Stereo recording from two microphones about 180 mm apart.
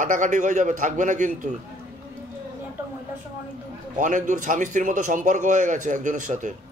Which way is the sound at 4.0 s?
45° right (ahead or behind).